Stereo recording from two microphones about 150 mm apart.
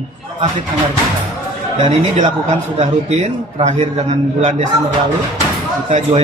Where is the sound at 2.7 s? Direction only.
50° right (ahead or behind).